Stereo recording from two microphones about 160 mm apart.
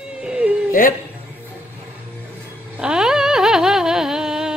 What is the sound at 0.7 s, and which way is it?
Speech, 60° left (ahead or behind).